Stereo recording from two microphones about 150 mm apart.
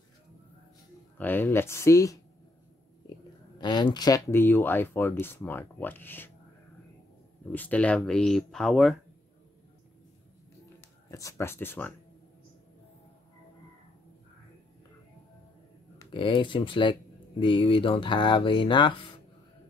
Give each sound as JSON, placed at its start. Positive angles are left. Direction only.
{"t": 1.1, "sound": "speech", "side_deg": 15}
{"t": 3.5, "sound": "speech", "side_deg": 30}
{"t": 7.5, "sound": "speech", "side_deg": 10}
{"t": 11.1, "sound": "speech", "side_deg": 20}
{"t": 16.1, "sound": "speech", "side_deg": 35}